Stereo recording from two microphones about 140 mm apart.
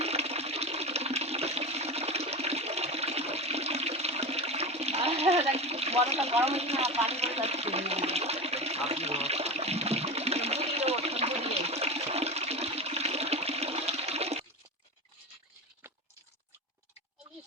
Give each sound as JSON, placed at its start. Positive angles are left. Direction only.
{"t": 0.0, "sound": "toilet flush", "side_deg": -50}